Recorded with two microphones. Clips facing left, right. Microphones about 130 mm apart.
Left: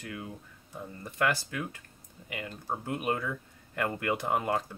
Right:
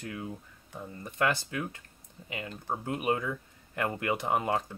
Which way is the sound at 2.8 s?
15° right (ahead or behind).